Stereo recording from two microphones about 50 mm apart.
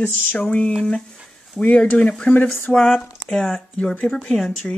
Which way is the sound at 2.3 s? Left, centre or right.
Left.